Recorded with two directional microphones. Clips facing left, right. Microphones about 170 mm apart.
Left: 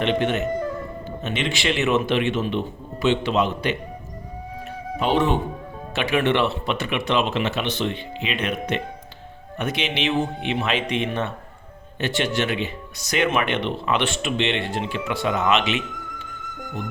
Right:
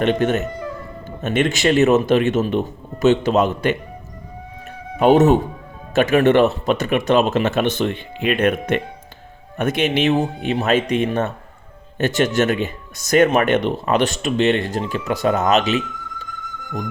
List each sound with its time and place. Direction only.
0.0 s speech: 45° right (ahead or behind)
4.9 s speech: 45° right (ahead or behind)